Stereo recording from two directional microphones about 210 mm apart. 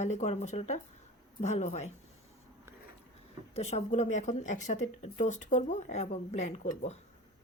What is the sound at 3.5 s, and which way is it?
Speech, 30° left (ahead or behind).